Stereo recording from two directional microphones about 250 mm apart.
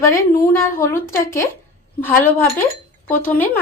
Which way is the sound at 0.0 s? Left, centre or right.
Centre.